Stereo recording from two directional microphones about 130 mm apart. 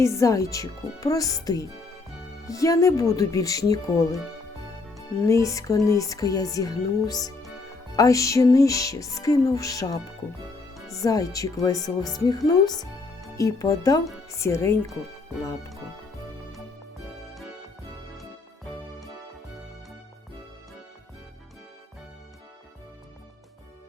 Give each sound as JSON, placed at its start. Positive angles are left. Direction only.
{"t": 0.0, "sound": "music", "side_deg": 25}
{"t": 5.2, "sound": "music", "side_deg": 25}
{"t": 12.5, "sound": "speech", "side_deg": 30}
{"t": 13.3, "sound": "music", "side_deg": 25}